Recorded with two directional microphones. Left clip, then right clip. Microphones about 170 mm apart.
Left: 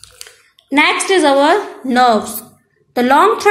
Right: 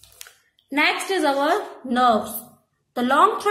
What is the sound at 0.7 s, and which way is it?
A woman's voice, 10° left (ahead or behind).